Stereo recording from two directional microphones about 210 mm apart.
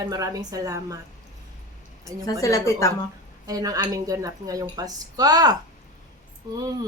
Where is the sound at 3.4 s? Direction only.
15° right (ahead or behind).